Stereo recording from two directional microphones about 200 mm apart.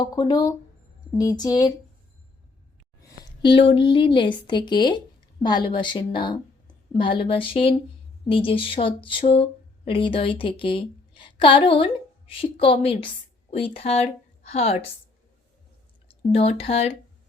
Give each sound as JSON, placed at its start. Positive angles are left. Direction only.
{"t": 0.0, "sound": "speech", "side_deg": 20}
{"t": 3.2, "sound": "speech", "side_deg": 25}
{"t": 16.0, "sound": "speech", "side_deg": 30}